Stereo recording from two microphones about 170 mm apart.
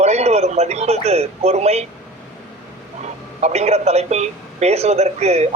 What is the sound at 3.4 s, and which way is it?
A man's voice, 40° right (ahead or behind).